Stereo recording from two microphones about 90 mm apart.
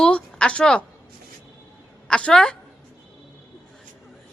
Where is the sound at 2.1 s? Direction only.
10° left (ahead or behind).